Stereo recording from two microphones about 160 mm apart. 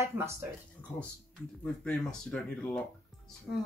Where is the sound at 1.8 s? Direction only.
5° left (ahead or behind).